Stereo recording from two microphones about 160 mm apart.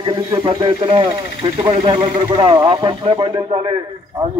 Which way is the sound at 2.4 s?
30° right (ahead or behind).